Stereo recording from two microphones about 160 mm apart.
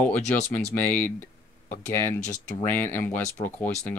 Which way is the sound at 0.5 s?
10° left (ahead or behind).